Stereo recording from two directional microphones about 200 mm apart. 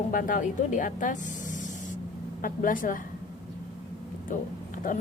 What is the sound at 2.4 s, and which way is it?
Speech, 45° left (ahead or behind).